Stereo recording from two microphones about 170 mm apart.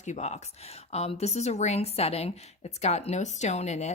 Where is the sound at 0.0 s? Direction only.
45° left (ahead or behind).